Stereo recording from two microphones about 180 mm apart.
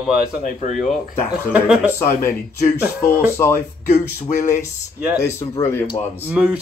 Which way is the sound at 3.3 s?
15° left (ahead or behind).